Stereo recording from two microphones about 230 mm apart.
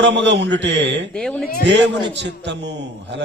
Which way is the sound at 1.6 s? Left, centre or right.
Right.